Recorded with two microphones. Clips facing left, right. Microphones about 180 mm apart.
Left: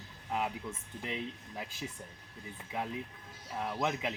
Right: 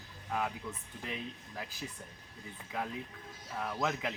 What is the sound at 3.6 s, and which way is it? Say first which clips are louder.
Speech: left 1 dB; 15° left (ahead or behind).